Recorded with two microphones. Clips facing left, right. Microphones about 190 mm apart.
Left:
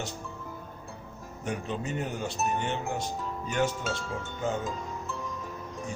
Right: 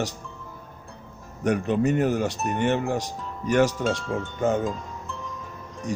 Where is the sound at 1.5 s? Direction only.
65° right (ahead or behind).